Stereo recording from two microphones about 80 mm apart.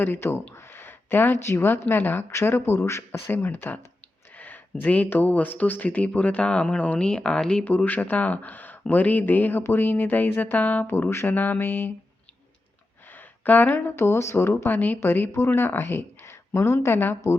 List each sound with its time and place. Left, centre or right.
0.0 s speech: left
7.6 s speech: left
10.9 s speech: left
13.1 s speech: left